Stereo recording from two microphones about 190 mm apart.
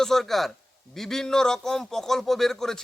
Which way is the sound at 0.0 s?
Centre (ahead or behind).